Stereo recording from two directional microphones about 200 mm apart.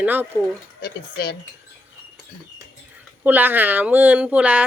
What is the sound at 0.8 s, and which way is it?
Speech, 50° left (ahead or behind).